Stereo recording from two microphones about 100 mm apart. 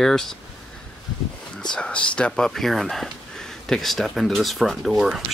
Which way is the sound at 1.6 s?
10° left (ahead or behind).